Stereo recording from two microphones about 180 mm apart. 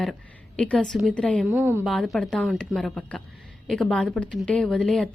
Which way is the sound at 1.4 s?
10° right (ahead or behind).